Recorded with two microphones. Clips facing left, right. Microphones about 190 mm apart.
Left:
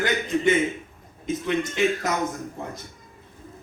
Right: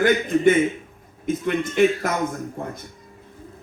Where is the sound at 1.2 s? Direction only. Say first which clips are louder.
Right 2 dB; 55° right (ahead or behind).